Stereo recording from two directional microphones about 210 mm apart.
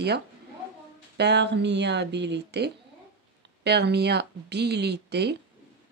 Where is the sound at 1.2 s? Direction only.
55° right (ahead or behind).